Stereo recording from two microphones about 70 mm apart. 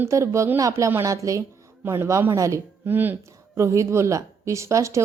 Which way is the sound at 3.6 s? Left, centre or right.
Right.